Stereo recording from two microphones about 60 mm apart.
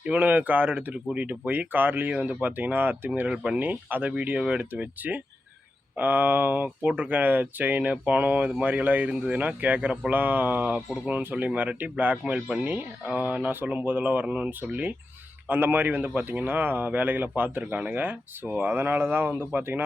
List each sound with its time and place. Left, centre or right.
0.0 s speech: right
3.2 s speech: centre
3.6 s speech: right
4.1 s speech: centre
12.1 s speech: centre
12.6 s speech: right
15.4 s speech: right